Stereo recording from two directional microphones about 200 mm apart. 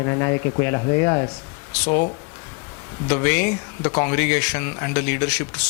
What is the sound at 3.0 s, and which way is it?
Speech, 15° left (ahead or behind).